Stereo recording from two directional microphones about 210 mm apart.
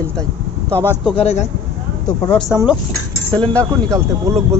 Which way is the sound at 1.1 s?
30° left (ahead or behind).